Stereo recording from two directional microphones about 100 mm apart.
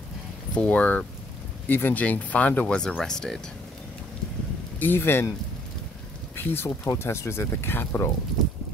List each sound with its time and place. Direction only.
0.6 s speech: 15° left (ahead or behind)
4.7 s speech: 20° left (ahead or behind)
6.3 s speech: 25° left (ahead or behind)